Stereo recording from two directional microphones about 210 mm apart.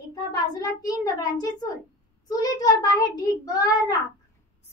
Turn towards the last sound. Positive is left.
turn(degrees=15)  # may be behind; listen again after turning